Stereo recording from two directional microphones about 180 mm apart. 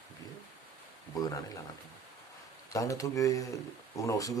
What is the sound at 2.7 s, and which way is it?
Speech, 20° left (ahead or behind).